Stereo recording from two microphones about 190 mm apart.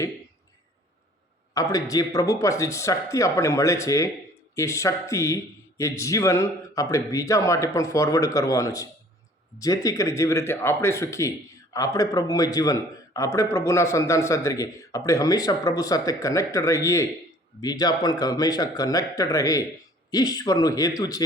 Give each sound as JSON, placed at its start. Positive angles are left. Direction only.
{"t": 1.5, "sound": "a man's voice", "side_deg": 20}